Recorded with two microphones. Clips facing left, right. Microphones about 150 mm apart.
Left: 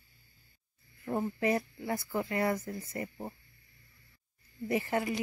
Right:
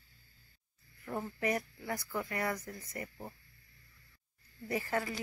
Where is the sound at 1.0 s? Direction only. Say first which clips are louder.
Left 5 dB; 25° left (ahead or behind).